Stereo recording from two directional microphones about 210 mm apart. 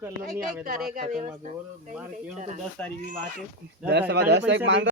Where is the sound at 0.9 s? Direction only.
40° right (ahead or behind).